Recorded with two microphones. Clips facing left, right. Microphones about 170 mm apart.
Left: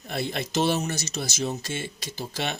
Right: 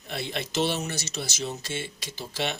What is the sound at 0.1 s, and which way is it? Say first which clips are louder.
Speech: left 3 dB; 45° left (ahead or behind).